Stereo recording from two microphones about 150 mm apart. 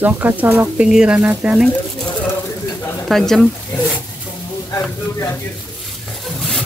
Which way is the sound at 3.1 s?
5° left (ahead or behind).